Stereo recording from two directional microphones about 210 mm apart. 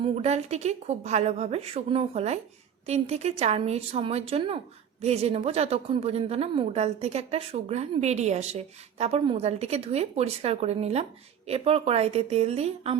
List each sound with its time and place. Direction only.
0.0 s a woman's voice: 30° right (ahead or behind)